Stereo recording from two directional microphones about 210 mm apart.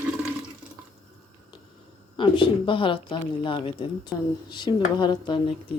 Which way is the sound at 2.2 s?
25° left (ahead or behind).